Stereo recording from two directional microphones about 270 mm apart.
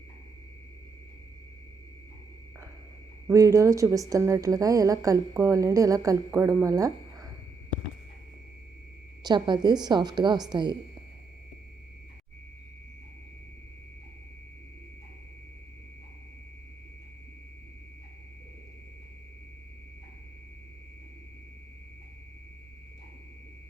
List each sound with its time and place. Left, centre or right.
3.2 s a woman's voice: centre
9.2 s a woman's voice: centre